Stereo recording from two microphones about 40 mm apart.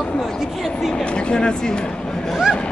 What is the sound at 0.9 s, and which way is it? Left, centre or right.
Speech, left.